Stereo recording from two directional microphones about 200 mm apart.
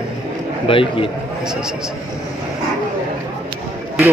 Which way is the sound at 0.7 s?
25° left (ahead or behind).